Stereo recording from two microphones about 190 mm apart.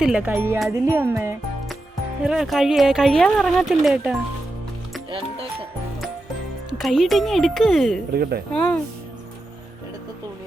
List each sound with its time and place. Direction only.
0.0 s speech: 5° right (ahead or behind)
6.7 s speech: centre (ahead or behind)
8.1 s speech: 55° right (ahead or behind)
8.5 s speech: 5° left (ahead or behind)